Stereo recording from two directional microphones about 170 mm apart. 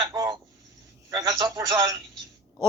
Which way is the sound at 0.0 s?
20° right (ahead or behind).